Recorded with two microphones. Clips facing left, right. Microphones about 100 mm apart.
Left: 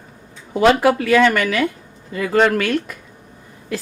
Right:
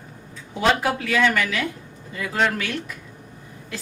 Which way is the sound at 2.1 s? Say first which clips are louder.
Left 7 dB; 65° left (ahead or behind).